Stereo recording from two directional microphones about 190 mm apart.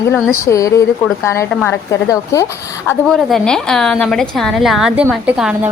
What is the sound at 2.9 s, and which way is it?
A woman's voice, centre (ahead or behind).